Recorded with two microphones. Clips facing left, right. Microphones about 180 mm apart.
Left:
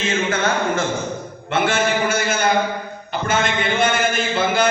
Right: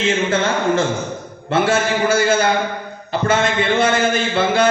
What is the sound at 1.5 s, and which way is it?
A man's voice, 30° right (ahead or behind).